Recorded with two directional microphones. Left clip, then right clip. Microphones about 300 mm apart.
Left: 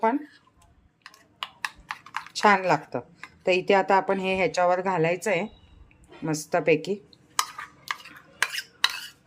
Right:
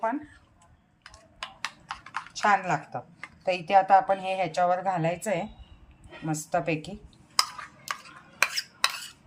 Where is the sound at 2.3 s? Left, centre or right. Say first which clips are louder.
Left 4 dB; centre.